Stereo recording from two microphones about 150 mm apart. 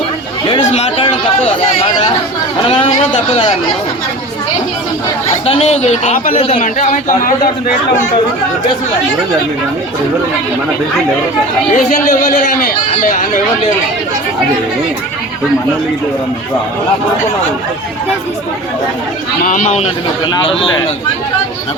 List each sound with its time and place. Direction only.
0.4 s chatter: 40° left (ahead or behind)
2.6 s a sound: 35° left (ahead or behind)
5.5 s speech: 45° left (ahead or behind)
6.6 s speech: 60° left (ahead or behind)
11.7 s speech: 60° left (ahead or behind)
19.4 s speech: 65° left (ahead or behind)
20.2 s speech: 30° left (ahead or behind)